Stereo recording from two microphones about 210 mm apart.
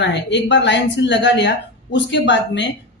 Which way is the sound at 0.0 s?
55° left (ahead or behind).